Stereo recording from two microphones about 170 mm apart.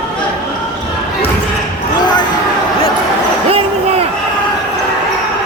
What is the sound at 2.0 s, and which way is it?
Basketball bounce, 25° left (ahead or behind).